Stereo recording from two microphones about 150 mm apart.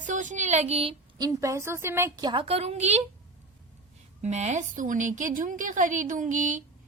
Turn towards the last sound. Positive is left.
turn(degrees=-60)  # may be behind; listen again after turning